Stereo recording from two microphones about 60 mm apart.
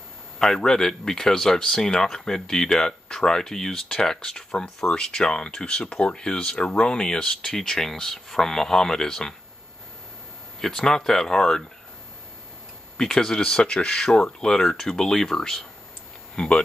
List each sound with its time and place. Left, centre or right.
0.4 s speech: centre
10.6 s speech: centre
12.9 s speech: centre
16.3 s speech: centre